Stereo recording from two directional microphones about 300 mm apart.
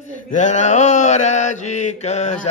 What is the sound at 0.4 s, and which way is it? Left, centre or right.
Mantra, left.